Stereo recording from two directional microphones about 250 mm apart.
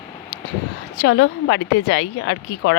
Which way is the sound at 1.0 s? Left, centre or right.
Left.